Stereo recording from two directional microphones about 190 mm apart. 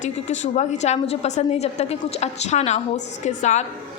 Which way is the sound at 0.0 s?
40° left (ahead or behind).